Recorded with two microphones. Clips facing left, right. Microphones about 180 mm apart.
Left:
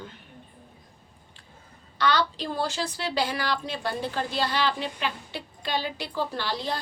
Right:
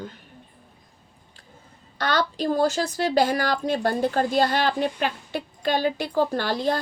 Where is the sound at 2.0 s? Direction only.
45° right (ahead or behind).